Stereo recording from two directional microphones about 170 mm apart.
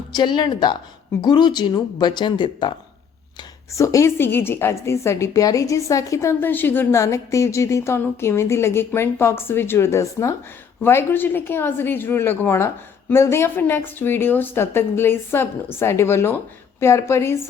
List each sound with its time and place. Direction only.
0.1 s a woman's voice: 25° left (ahead or behind)